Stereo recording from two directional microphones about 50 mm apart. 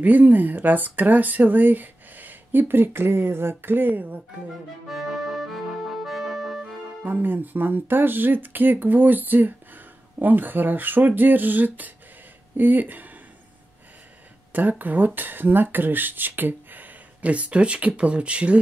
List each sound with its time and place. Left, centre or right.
0.0 s speech: right
4.8 s accordion: centre
7.1 s speech: right
14.5 s speech: right